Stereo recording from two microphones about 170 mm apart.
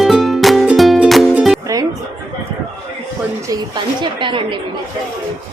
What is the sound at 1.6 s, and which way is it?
Music, 20° right (ahead or behind).